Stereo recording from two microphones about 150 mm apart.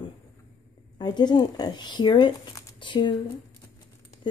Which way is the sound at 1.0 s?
30° left (ahead or behind).